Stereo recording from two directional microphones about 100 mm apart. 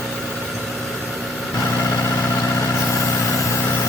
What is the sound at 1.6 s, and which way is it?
Vehicle, 25° left (ahead or behind).